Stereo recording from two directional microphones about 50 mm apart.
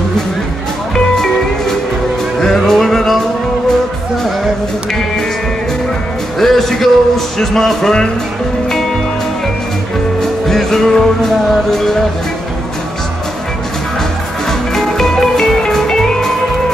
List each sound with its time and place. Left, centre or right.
0.9 s music: centre
6.4 s music: centre
10.5 s music: centre
14.7 s music: centre